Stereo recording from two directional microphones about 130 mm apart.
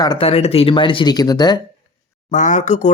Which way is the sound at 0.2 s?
50° left (ahead or behind).